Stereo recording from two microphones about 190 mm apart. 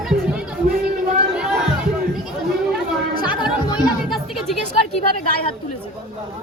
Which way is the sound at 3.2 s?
25° left (ahead or behind).